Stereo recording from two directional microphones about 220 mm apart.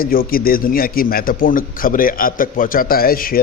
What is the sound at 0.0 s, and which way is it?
A man's voice, 40° left (ahead or behind).